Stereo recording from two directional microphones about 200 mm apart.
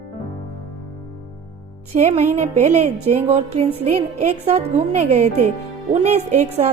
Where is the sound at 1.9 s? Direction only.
35° right (ahead or behind).